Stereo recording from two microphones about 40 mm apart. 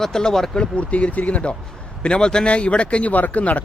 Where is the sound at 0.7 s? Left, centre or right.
Left.